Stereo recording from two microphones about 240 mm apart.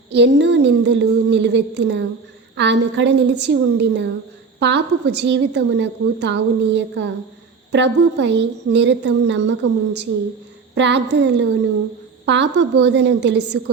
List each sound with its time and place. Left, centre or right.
0.1 s a woman's voice: right